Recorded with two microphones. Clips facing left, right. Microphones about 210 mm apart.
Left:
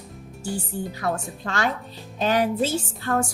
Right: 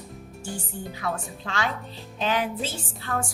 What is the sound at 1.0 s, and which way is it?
A woman's voice, 45° left (ahead or behind).